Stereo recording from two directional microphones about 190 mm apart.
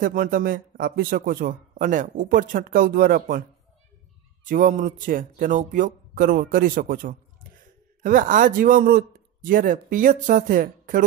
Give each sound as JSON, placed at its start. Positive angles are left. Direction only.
{"t": 0.0, "sound": "speech", "side_deg": -45}
{"t": 4.5, "sound": "speech", "side_deg": -40}